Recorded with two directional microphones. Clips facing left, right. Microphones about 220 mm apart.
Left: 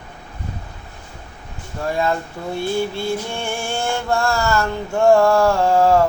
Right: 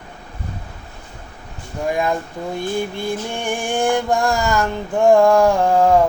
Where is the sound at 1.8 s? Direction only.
15° right (ahead or behind).